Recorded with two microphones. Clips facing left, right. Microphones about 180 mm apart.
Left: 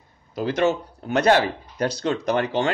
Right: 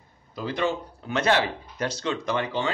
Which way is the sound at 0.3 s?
75° left (ahead or behind).